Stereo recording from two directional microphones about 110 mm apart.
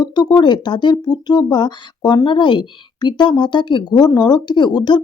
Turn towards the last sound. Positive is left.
turn(degrees=40)  # may be behind; listen again after turning